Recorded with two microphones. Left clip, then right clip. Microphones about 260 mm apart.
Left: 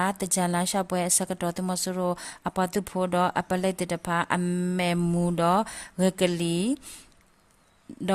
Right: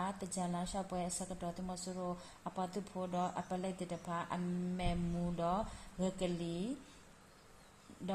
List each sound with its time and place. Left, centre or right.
0.0 s a woman's voice: left